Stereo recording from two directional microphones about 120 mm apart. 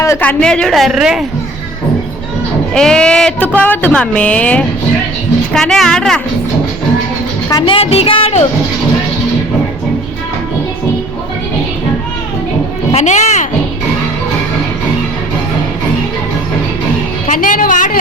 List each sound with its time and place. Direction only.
0.2 s a woman's voice: 10° left (ahead or behind)
2.7 s a woman's voice: 5° left (ahead or behind)
7.6 s speech: 50° left (ahead or behind)
12.9 s speech: 70° left (ahead or behind)
17.2 s music: 90° left